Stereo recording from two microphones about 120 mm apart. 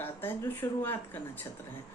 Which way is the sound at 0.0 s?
15° left (ahead or behind).